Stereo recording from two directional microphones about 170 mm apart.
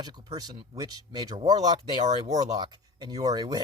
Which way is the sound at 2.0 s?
45° right (ahead or behind).